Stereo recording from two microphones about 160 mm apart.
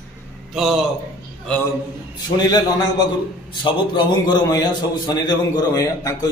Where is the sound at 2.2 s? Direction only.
25° left (ahead or behind).